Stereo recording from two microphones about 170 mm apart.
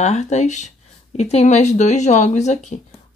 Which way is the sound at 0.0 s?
40° left (ahead or behind).